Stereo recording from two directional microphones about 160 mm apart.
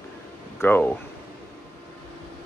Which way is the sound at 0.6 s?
10° left (ahead or behind).